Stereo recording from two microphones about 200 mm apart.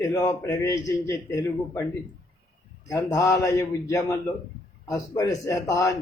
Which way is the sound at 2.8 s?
15° left (ahead or behind).